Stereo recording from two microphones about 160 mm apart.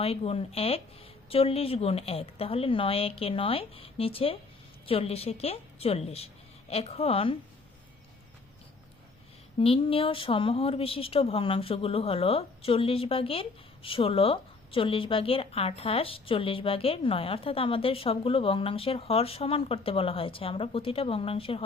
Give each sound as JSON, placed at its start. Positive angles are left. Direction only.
{"t": 0.0, "sound": "speech", "side_deg": 40}
{"t": 9.6, "sound": "speech", "side_deg": 35}